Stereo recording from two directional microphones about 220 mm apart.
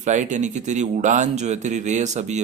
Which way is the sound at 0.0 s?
35° right (ahead or behind).